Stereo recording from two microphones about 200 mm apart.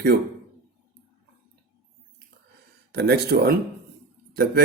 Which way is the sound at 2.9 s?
55° right (ahead or behind).